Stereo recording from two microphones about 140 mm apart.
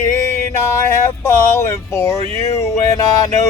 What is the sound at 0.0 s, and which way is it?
Music, 20° left (ahead or behind).